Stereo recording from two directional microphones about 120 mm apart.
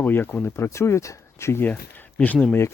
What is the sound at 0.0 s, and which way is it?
Speech, 15° left (ahead or behind).